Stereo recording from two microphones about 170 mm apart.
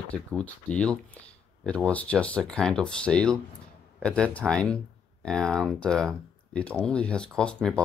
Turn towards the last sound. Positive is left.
turn(degrees=5)  # may be behind; listen again after turning